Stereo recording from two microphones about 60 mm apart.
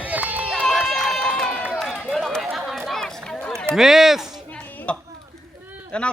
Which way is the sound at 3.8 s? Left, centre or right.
Centre.